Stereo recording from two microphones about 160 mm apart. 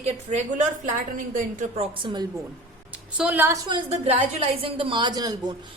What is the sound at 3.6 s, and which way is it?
A woman's voice, 30° right (ahead or behind).